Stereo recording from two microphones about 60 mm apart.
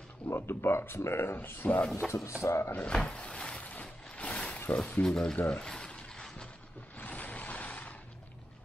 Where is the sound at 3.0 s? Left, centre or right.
Centre.